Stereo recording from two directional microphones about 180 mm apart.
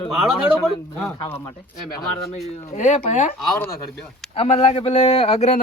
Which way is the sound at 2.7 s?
40° left (ahead or behind).